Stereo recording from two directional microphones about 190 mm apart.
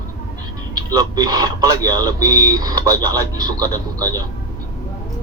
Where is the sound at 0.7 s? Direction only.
20° right (ahead or behind).